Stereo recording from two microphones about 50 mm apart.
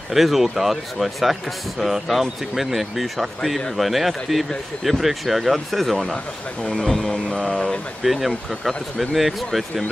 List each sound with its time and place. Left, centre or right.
0.1 s speech: centre
6.6 s speech: centre
8.0 s speech: centre